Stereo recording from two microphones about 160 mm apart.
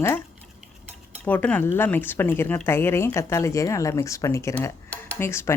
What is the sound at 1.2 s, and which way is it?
A woman's voice, 10° left (ahead or behind).